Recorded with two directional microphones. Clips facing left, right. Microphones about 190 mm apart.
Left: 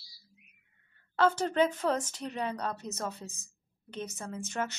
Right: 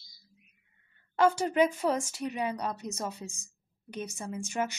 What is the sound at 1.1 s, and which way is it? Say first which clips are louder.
Speech: right 2 dB; 10° right (ahead or behind).